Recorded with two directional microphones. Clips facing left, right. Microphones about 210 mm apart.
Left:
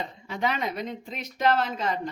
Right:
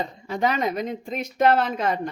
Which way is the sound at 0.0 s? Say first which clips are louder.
Right 5 dB; 40° right (ahead or behind).